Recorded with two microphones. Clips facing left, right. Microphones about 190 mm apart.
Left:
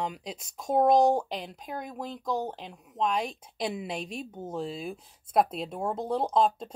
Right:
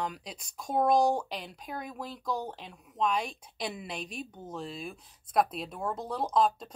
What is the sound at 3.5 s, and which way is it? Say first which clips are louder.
Speech: left 5 dB; 5° left (ahead or behind).